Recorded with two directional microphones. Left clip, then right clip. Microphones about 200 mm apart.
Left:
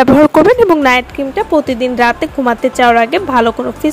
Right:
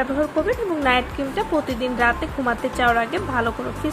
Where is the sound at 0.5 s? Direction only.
50° left (ahead or behind).